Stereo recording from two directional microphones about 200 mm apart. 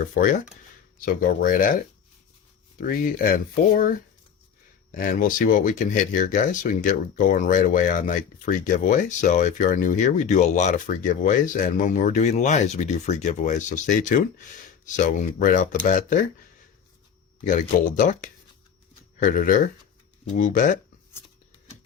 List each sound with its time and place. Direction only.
0.0 s speech: 40° left (ahead or behind)
2.8 s speech: 45° left (ahead or behind)
4.9 s speech: 45° left (ahead or behind)
17.5 s speech: 40° left (ahead or behind)